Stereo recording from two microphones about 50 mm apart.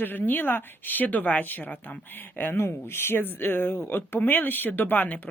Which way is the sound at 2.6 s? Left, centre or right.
Left.